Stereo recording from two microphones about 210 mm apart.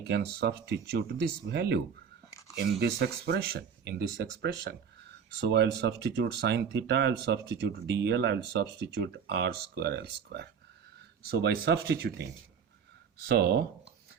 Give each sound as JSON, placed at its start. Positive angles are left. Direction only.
{"t": 0.0, "sound": "speech", "side_deg": -50}
{"t": 13.2, "sound": "speech", "side_deg": -50}